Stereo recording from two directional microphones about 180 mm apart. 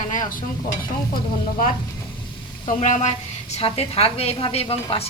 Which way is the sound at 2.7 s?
40° left (ahead or behind).